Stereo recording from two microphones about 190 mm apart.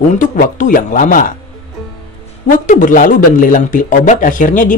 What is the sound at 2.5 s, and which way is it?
Speech, 45° left (ahead or behind).